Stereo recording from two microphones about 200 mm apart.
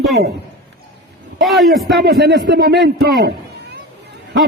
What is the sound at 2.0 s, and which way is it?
Speech, 55° right (ahead or behind).